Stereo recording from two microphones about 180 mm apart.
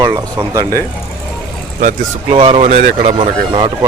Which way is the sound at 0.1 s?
15° right (ahead or behind).